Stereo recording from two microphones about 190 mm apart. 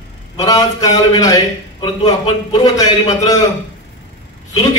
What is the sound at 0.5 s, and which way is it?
A man's voice, 20° left (ahead or behind).